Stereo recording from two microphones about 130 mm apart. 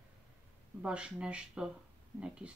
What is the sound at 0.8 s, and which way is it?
Speech, 10° right (ahead or behind).